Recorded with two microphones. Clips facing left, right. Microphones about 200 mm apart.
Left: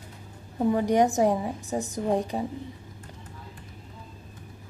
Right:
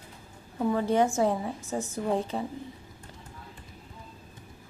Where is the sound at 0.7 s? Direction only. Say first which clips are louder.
Left 3 dB; 15° left (ahead or behind).